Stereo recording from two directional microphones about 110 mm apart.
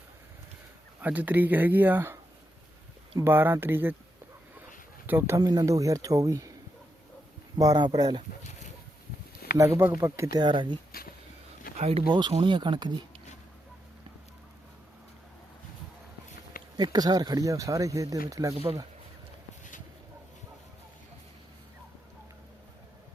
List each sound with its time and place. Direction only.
1.0 s speech: 15° right (ahead or behind)
3.2 s speech: 20° right (ahead or behind)
5.0 s speech: 20° right (ahead or behind)
5.4 s speech: 40° right (ahead or behind)
7.6 s speech: 35° right (ahead or behind)
9.6 s speech: 20° right (ahead or behind)
10.4 s speech: 45° right (ahead or behind)
11.8 s speech: 65° right (ahead or behind)
12.3 s speech: 50° right (ahead or behind)
16.7 s speech: 40° right (ahead or behind)
18.5 s speech: 55° right (ahead or behind)